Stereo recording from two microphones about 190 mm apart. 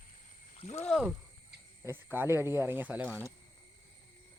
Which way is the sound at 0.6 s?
35° left (ahead or behind).